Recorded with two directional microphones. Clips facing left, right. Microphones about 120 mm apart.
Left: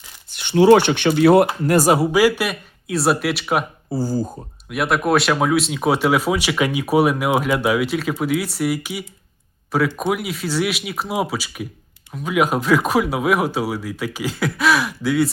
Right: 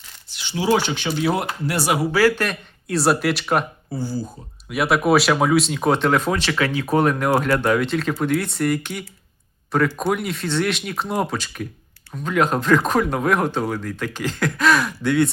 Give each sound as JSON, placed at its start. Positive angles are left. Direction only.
{"t": 0.3, "sound": "speech", "side_deg": 55}
{"t": 1.6, "sound": "speech", "side_deg": 45}
{"t": 2.1, "sound": "speech", "side_deg": 10}
{"t": 3.9, "sound": "speech", "side_deg": 40}
{"t": 4.7, "sound": "speech", "side_deg": 0}